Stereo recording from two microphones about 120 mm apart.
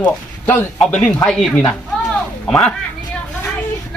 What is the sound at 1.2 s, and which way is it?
A man's voice, 5° left (ahead or behind).